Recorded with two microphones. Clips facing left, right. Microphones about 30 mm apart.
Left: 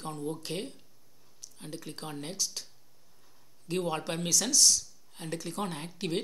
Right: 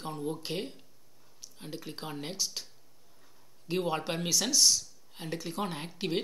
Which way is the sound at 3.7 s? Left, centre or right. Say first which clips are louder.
Right 1 dB; centre.